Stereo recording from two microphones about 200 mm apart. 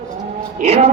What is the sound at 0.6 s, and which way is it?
Music, 35° right (ahead or behind).